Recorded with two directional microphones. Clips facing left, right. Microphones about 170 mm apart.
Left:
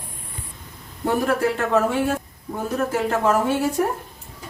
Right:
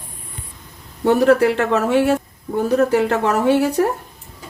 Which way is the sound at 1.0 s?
75° right (ahead or behind).